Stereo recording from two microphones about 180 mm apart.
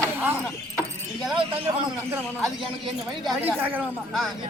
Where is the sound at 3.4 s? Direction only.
10° right (ahead or behind).